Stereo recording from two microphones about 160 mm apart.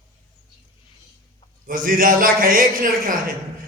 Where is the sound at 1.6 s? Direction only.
60° right (ahead or behind).